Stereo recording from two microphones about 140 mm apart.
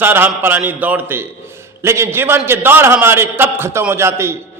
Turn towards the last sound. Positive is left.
turn(degrees=-20)  # may be behind; listen again after turning